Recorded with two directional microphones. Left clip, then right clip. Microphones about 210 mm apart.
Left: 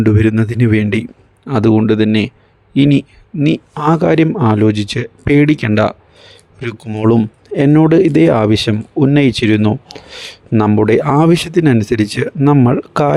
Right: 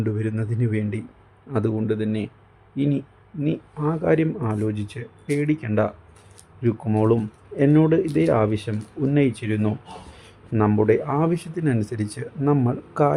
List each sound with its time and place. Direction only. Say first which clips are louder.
0.0 s speech: left 14 dB; 40° left (ahead or behind)